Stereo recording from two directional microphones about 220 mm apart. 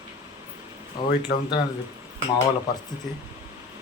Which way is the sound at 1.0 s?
20° left (ahead or behind).